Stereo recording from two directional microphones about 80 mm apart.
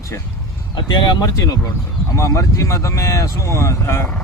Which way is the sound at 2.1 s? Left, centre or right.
Left.